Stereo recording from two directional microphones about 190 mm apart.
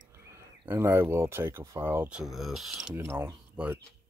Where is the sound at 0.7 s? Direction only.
10° right (ahead or behind).